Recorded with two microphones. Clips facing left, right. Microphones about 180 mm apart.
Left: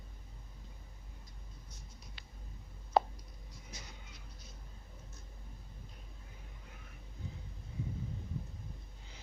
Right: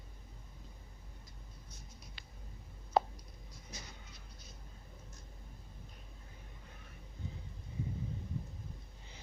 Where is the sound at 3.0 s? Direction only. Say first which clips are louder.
Left 1 dB; 60° left (ahead or behind).